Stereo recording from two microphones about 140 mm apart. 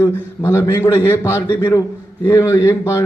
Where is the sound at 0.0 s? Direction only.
15° left (ahead or behind).